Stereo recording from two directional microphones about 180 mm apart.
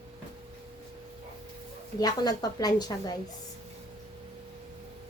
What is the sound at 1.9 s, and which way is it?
A woman's voice, 20° left (ahead or behind).